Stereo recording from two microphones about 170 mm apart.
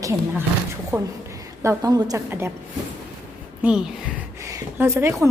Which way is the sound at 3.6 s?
5° right (ahead or behind).